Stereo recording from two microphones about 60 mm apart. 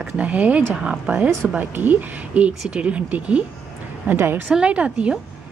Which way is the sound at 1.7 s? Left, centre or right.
Right.